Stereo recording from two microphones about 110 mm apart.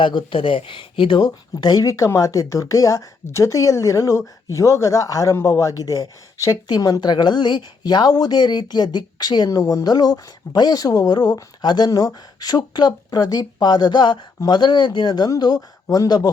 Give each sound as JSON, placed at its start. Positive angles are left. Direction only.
{"t": 0.0, "sound": "speech", "side_deg": 45}